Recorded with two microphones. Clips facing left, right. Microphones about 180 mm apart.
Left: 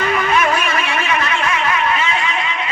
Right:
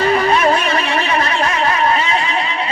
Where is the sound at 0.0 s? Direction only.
35° right (ahead or behind).